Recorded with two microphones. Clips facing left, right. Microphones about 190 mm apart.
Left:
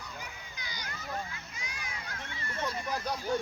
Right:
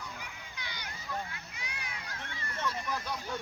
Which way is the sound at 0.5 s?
60° right (ahead or behind).